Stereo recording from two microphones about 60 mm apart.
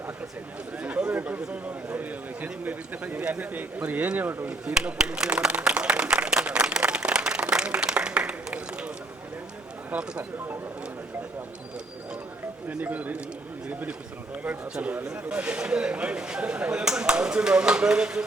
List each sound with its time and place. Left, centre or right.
0.8 s a man's voice: centre
4.4 s speech: centre
5.5 s applause: centre
9.9 s speech: centre
12.6 s a man's voice: right
14.4 s a man's voice: right